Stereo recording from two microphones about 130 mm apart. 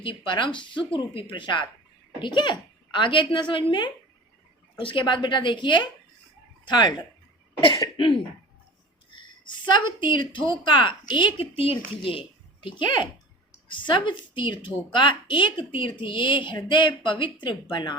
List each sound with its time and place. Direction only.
0.3 s a woman's voice: 40° left (ahead or behind)
9.0 s a sound: 35° left (ahead or behind)
10.7 s a woman's voice: 40° left (ahead or behind)